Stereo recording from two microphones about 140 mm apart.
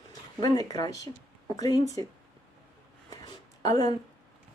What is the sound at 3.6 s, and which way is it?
Speech, 25° left (ahead or behind).